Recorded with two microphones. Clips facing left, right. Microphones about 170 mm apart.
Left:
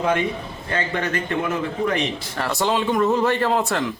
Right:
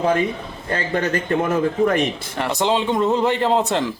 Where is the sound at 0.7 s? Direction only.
35° right (ahead or behind).